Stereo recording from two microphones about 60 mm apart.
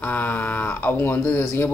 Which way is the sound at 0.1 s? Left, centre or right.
Left.